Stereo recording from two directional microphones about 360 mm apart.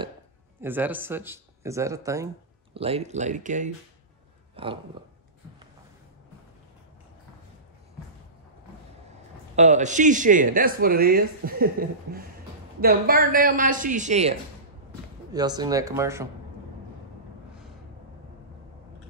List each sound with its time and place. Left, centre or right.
0.6 s speech: centre
9.6 s speech: centre
15.3 s speech: centre